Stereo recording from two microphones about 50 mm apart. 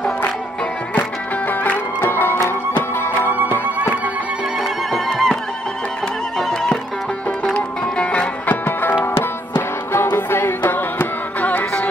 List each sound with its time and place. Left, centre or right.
1.5 s music: left
4.9 s neigh: centre
7.5 s music: left
8.5 s music: left
9.0 s music: left
10.6 s music: left